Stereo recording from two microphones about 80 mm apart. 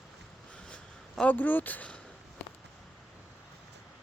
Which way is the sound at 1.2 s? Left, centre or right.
Left.